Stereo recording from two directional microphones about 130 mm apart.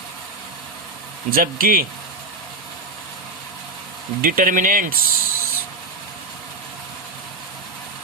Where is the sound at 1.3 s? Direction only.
90° right.